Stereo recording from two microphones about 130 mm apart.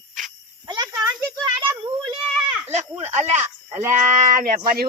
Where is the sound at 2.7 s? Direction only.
60° right (ahead or behind).